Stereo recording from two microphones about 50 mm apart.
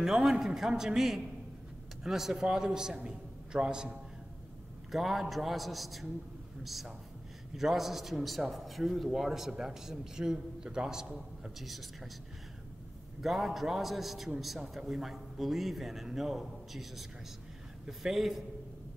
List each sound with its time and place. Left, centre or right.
0.0 s a man's voice: centre
4.9 s a man's voice: centre
11.6 s a man's voice: centre
13.2 s a man's voice: centre